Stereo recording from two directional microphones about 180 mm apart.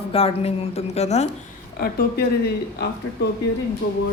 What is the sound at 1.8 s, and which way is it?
Speech, 60° left (ahead or behind).